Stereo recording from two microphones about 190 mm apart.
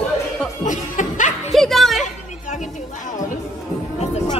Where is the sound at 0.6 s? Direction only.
40° left (ahead or behind).